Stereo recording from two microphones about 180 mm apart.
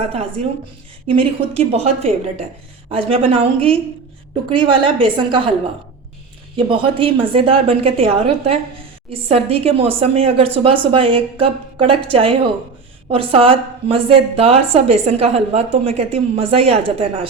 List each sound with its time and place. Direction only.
0.1 s a woman's voice: 35° right (ahead or behind)
6.6 s a woman's voice: 30° right (ahead or behind)